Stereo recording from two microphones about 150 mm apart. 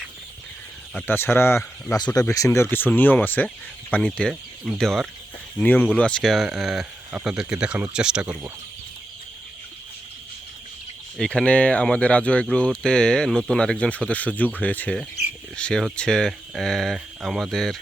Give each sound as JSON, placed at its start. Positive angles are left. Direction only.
{"t": 0.9, "sound": "speech", "side_deg": 15}
{"t": 11.2, "sound": "speech", "side_deg": 5}